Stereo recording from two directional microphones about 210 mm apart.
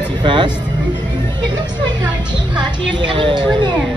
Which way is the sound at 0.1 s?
20° right (ahead or behind).